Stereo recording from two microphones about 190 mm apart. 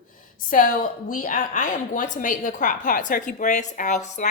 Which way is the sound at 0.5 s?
45° left (ahead or behind).